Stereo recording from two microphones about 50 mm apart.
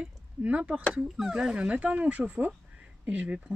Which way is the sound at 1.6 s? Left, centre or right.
Right.